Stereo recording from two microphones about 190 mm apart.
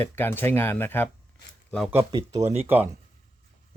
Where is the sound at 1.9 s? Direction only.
15° right (ahead or behind).